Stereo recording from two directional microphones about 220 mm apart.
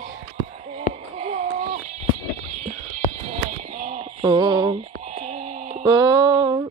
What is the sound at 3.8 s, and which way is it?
Music, 30° right (ahead or behind).